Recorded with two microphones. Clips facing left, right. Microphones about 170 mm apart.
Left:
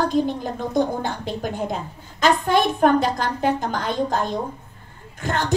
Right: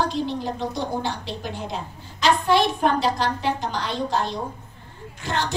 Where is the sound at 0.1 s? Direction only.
50° left (ahead or behind).